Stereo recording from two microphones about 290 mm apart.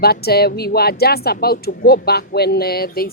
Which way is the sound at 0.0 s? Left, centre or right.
Left.